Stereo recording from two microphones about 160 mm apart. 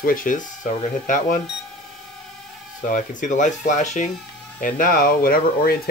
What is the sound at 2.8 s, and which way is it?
Speech, 55° left (ahead or behind).